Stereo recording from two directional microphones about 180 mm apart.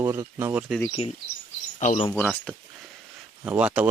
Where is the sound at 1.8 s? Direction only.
40° left (ahead or behind).